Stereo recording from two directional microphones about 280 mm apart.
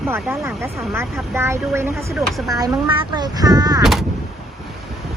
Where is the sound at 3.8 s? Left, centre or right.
Centre.